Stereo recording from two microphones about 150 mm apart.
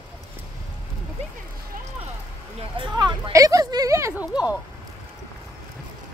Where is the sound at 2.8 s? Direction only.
30° right (ahead or behind).